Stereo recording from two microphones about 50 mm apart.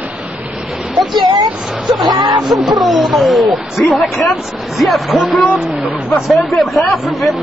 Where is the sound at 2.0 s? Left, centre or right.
Centre.